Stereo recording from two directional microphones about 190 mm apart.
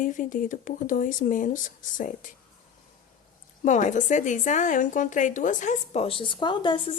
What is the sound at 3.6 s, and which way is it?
A woman's voice, 40° left (ahead or behind).